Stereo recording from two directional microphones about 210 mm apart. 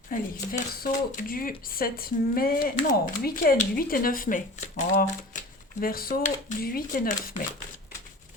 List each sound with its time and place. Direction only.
0.1 s speech: 40° left (ahead or behind)